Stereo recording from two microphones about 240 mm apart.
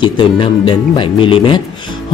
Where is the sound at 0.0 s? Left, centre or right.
Left.